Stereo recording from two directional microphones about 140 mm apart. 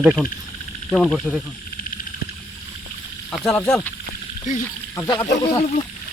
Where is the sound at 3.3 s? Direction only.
5° left (ahead or behind).